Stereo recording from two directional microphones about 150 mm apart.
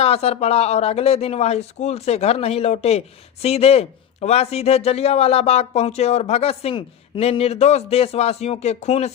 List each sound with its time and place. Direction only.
0.0 s a man's voice: 45° left (ahead or behind)